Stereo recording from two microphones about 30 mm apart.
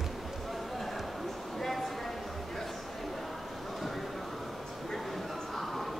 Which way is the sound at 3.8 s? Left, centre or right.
Centre.